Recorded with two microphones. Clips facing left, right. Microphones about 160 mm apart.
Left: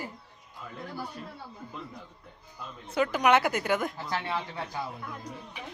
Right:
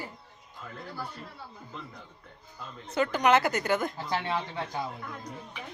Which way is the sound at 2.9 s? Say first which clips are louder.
Even; 5° left (ahead or behind).